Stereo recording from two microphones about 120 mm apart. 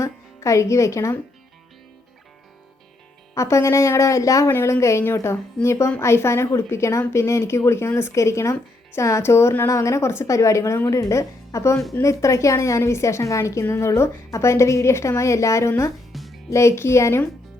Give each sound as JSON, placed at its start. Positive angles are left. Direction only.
{"t": 0.0, "sound": "speech", "side_deg": 25}
{"t": 3.3, "sound": "a woman's voice", "side_deg": 25}
{"t": 16.1, "sound": "music", "side_deg": 0}
{"t": 16.5, "sound": "a woman's voice", "side_deg": 25}